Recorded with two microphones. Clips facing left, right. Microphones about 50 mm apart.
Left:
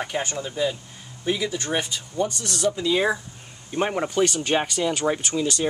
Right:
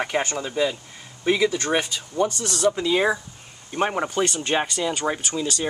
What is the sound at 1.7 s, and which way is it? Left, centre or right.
Speech, right.